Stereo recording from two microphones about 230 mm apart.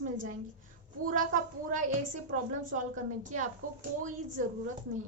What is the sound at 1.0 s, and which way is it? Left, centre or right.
Speech, right.